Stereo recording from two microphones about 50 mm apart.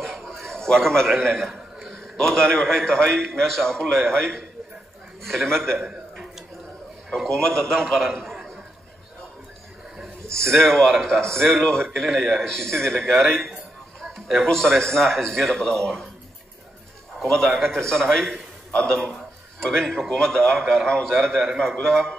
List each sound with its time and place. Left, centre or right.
0.0 s a sound: centre
0.5 s a man's voice: centre
1.4 s a sound: centre
1.9 s a man's voice: centre
7.2 s a man's voice: centre
10.5 s a man's voice: centre
12.0 s a man's voice: centre
12.4 s a man's voice: centre
17.6 s a man's voice: centre